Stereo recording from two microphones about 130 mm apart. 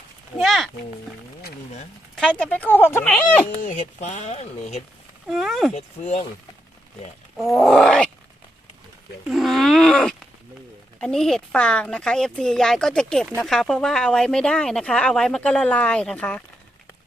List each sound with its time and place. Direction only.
0.3 s a sound: centre (ahead or behind)
2.4 s speech: 10° left (ahead or behind)
3.6 s speech: 70° left (ahead or behind)
5.3 s speech: centre (ahead or behind)
5.7 s speech: 60° left (ahead or behind)
7.3 s speech: centre (ahead or behind)
9.3 s speech: centre (ahead or behind)